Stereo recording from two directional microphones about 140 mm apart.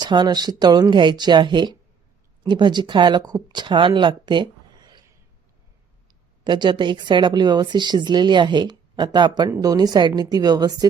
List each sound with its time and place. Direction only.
0.0 s speech: 30° right (ahead or behind)
6.4 s a woman's voice: 35° right (ahead or behind)